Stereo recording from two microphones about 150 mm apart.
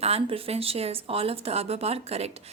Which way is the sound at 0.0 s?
40° right (ahead or behind).